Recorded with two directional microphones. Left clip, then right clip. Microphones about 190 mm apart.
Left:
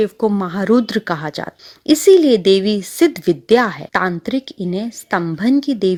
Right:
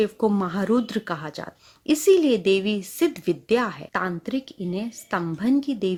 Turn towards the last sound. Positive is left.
turn(degrees=35)  # may be behind; listen again after turning